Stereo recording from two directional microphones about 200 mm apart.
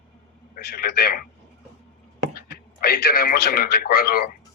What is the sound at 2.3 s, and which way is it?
Speech, 50° left (ahead or behind).